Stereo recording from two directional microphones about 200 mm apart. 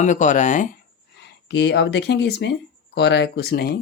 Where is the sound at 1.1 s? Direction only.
60° left (ahead or behind).